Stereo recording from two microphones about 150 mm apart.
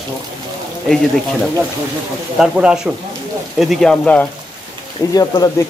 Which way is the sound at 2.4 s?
5° right (ahead or behind).